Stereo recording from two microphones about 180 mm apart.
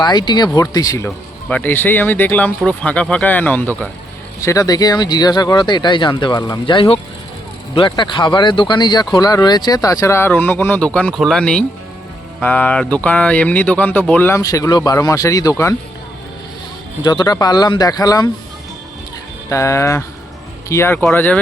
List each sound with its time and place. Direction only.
0.0 s speech: 25° left (ahead or behind)
17.0 s speech: 20° left (ahead or behind)
19.5 s speech: 15° left (ahead or behind)